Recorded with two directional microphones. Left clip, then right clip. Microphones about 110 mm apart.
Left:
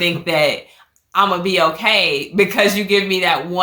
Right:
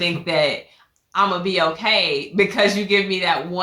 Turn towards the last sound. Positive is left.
turn(degrees=40)  # may be behind; listen again after turning